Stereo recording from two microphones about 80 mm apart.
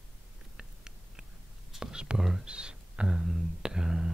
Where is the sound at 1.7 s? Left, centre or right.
Centre.